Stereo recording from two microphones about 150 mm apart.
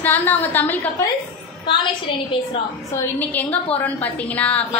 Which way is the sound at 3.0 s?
10° left (ahead or behind).